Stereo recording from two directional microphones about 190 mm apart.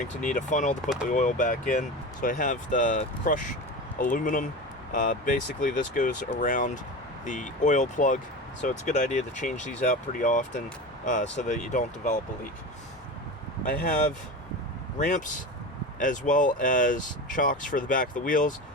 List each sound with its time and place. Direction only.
0.0 s speech: 40° left (ahead or behind)
13.7 s speech: 45° left (ahead or behind)